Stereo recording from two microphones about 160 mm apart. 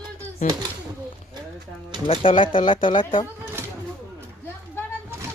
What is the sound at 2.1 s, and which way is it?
Speech, 35° left (ahead or behind).